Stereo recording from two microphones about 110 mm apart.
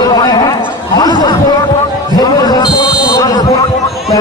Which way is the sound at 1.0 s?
40° left (ahead or behind).